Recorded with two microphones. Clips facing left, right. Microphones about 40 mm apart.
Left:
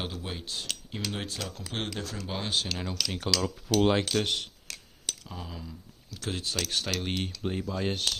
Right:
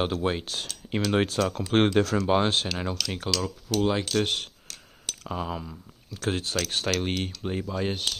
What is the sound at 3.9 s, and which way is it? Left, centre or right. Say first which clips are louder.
Cutlery: left 1 dB; centre.